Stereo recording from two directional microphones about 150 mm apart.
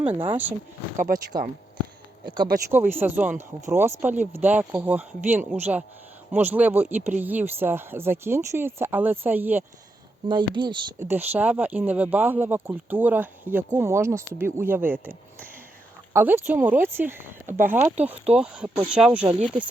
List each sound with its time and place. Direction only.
0.3 s speech: 10° right (ahead or behind)
0.9 s speech: 65° right (ahead or behind)
2.2 s speech: 30° right (ahead or behind)
2.6 s speech: 15° right (ahead or behind)
10.2 s speech: 30° right (ahead or behind)
11.0 s speech: 15° right (ahead or behind)